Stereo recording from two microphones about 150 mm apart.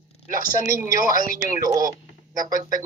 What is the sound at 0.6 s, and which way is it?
Speech, 20° right (ahead or behind).